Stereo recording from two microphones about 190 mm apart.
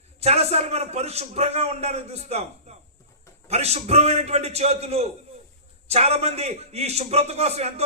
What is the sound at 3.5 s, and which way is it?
A man's voice, 35° right (ahead or behind).